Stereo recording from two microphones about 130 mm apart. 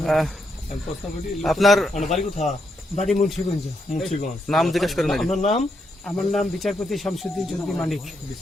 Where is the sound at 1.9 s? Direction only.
65° left (ahead or behind).